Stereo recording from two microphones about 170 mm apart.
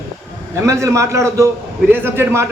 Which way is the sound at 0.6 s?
15° right (ahead or behind).